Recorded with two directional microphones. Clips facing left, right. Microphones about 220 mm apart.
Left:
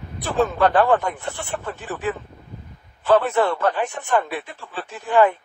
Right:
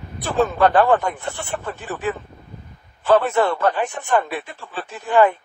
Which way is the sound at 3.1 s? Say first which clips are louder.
Right 1 dB; 45° right (ahead or behind).